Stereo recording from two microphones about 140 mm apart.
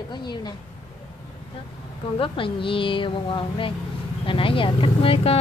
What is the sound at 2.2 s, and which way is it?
A woman's voice, 40° left (ahead or behind).